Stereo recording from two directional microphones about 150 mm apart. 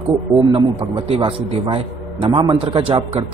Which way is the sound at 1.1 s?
35° right (ahead or behind).